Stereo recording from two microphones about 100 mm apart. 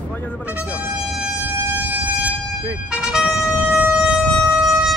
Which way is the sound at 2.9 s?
10° right (ahead or behind).